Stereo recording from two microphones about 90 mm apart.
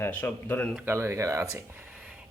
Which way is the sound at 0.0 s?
20° left (ahead or behind).